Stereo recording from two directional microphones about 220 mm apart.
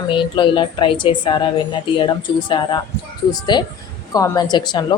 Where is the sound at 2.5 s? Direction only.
20° left (ahead or behind).